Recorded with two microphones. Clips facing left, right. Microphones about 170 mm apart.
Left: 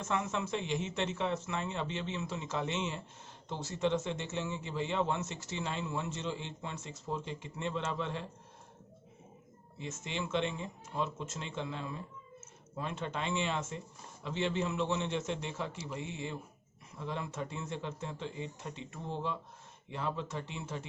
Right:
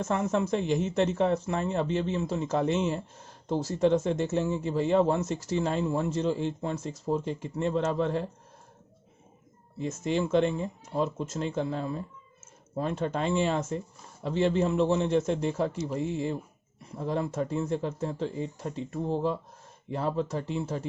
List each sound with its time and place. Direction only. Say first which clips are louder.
0.0 s speech: right 8 dB; 40° right (ahead or behind)
9.7 s speech: right 11 dB; 40° right (ahead or behind)